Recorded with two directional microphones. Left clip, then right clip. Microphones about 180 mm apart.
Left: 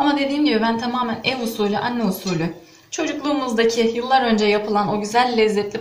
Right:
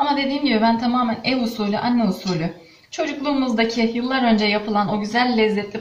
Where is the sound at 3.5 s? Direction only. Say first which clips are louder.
Left 3 dB; 30° left (ahead or behind).